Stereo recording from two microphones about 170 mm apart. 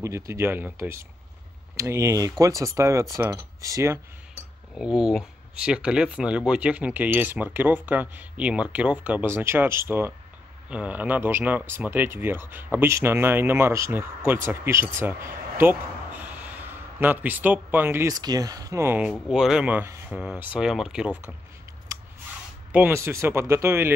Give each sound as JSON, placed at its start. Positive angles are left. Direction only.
{"t": 0.0, "sound": "speech", "side_deg": -15}
{"t": 4.7, "sound": "speech", "side_deg": -5}
{"t": 22.7, "sound": "speech", "side_deg": -10}